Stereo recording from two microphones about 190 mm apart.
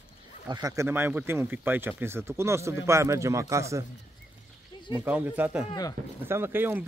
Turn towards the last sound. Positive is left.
turn(degrees=-10)  # may be behind; listen again after turning